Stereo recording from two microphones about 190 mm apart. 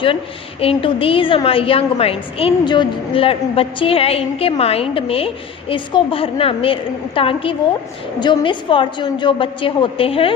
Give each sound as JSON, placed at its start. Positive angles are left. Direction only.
{"t": 0.6, "sound": "a woman's voice", "side_deg": 30}